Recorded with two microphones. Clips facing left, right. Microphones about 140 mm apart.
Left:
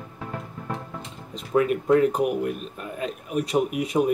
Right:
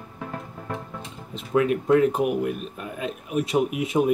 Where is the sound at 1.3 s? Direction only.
Centre (ahead or behind).